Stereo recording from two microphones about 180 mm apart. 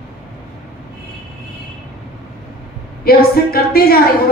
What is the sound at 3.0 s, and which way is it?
A woman's voice, 55° left (ahead or behind).